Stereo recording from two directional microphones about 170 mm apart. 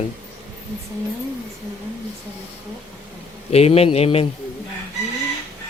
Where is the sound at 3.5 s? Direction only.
35° left (ahead or behind).